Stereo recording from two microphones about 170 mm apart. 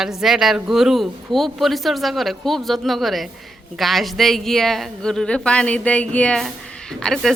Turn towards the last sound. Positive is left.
turn(degrees=0)  # may be behind; listen again after turning